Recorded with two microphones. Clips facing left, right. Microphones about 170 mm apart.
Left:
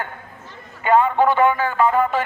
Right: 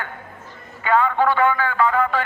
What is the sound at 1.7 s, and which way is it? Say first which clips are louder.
Music: left 2 dB; 20° left (ahead or behind).